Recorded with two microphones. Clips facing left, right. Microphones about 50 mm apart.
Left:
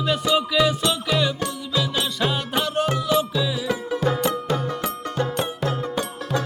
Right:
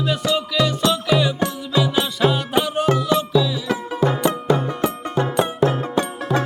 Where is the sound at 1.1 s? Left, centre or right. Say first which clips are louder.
Right 3 dB; centre.